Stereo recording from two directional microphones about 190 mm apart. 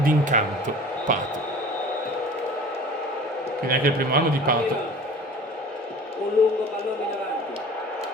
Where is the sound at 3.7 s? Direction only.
50° right (ahead or behind).